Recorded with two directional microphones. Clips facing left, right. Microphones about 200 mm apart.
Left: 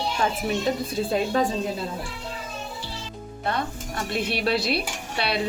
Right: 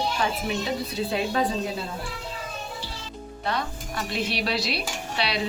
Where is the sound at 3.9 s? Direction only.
55° left (ahead or behind).